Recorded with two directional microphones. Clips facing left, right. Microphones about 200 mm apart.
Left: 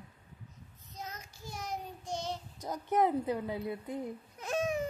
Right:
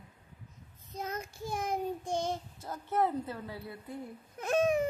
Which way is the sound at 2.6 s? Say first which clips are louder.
Left 3 dB; 15° left (ahead or behind).